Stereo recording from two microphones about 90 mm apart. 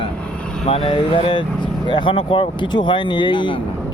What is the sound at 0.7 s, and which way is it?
Speech, 85° left.